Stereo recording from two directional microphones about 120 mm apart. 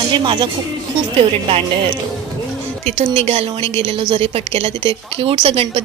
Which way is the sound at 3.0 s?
60° right (ahead or behind).